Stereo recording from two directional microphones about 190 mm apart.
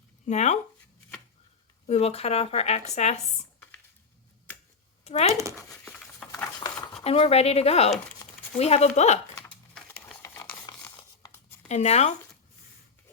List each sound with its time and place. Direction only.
0.3 s speech: 35° left (ahead or behind)
1.9 s speech: 35° left (ahead or behind)
5.4 s speech: 15° right (ahead or behind)
5.6 s patter: 5° left (ahead or behind)
7.0 s speech: 30° left (ahead or behind)
9.7 s tearing: 5° left (ahead or behind)
11.7 s speech: 35° left (ahead or behind)